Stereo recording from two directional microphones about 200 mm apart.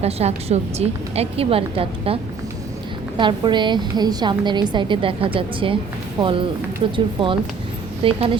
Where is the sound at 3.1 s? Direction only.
25° right (ahead or behind).